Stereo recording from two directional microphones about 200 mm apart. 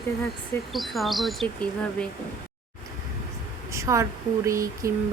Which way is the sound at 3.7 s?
15° right (ahead or behind).